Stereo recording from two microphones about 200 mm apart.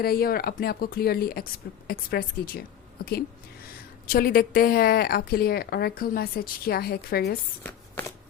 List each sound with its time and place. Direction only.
0.0 s a woman's voice: 50° left (ahead or behind)